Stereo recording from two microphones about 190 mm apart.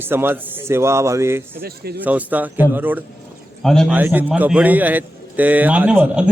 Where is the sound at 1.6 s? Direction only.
55° right (ahead or behind).